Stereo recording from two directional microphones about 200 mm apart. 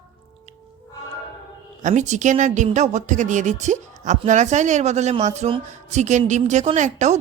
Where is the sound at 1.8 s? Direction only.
40° right (ahead or behind).